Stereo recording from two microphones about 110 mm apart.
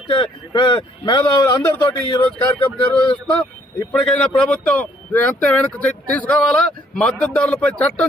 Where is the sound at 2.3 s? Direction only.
15° left (ahead or behind).